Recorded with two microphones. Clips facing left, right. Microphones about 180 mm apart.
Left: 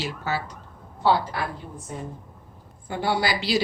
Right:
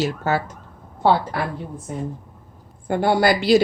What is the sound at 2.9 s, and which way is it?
Speech, 50° right (ahead or behind).